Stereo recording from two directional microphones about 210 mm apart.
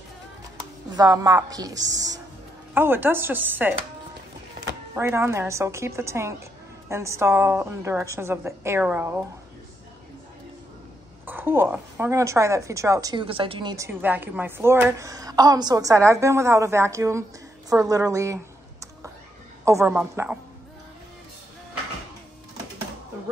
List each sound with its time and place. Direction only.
0.9 s a woman's voice: 15° right (ahead or behind)
4.9 s a woman's voice: 10° right (ahead or behind)
11.2 s a woman's voice: 10° right (ahead or behind)